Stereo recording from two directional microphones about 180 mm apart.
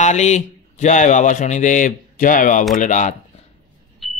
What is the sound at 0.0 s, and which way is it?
Speech, 40° left (ahead or behind).